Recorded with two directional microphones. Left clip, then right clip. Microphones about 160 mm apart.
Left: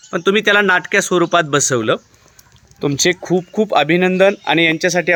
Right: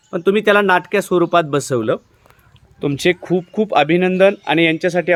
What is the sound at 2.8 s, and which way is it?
Speech, 10° left (ahead or behind).